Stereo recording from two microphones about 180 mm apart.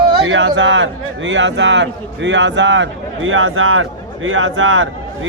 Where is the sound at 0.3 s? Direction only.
90° right.